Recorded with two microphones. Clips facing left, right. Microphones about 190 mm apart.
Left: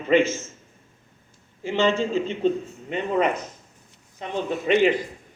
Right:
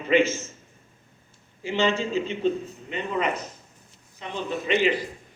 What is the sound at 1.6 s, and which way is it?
A man's voice, 50° left (ahead or behind).